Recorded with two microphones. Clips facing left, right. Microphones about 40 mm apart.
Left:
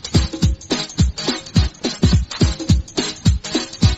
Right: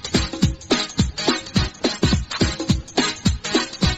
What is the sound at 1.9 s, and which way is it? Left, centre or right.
Music, right.